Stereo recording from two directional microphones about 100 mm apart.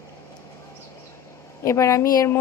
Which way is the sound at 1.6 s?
30° left (ahead or behind).